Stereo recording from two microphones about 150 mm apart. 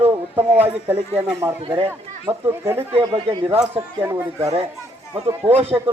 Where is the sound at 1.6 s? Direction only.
35° right (ahead or behind).